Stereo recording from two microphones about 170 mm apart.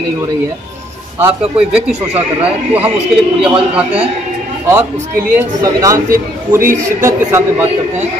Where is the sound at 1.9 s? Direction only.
10° right (ahead or behind).